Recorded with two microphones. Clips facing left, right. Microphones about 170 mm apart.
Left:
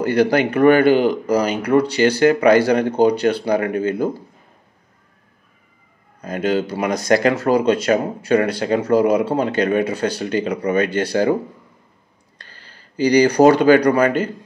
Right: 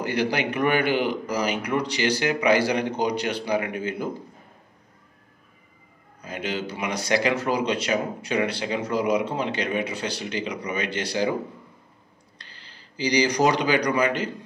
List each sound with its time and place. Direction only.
0.3 s speech: 45° left (ahead or behind)
3.1 s speech: 10° right (ahead or behind)
3.6 s speech: 45° left (ahead or behind)
6.2 s speech: 45° left (ahead or behind)
12.4 s speech: 50° left (ahead or behind)